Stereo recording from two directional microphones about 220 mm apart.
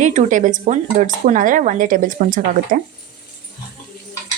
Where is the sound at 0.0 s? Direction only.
35° right (ahead or behind).